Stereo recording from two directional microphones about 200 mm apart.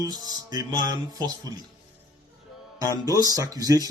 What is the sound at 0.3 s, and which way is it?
Speech, 20° right (ahead or behind).